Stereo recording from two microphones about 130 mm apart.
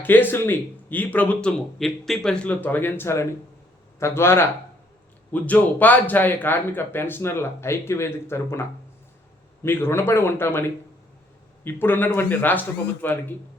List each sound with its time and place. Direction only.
0.0 s speech: 15° left (ahead or behind)
9.6 s speech: 15° left (ahead or behind)